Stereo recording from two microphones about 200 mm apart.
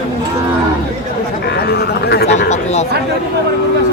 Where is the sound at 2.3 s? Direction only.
35° left (ahead or behind).